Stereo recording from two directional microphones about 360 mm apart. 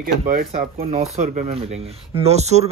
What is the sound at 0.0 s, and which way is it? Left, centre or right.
A man's voice, right.